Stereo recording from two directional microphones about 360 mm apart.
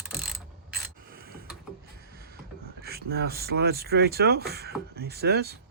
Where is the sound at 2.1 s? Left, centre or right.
Right.